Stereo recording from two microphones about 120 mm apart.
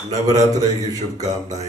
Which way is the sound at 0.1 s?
30° right (ahead or behind).